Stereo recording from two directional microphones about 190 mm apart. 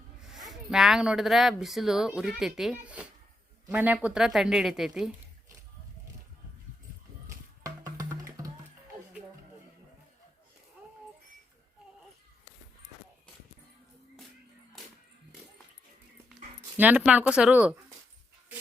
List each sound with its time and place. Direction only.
0.2 s speech: centre (ahead or behind)
7.3 s music: 15° right (ahead or behind)
16.7 s speech: 10° right (ahead or behind)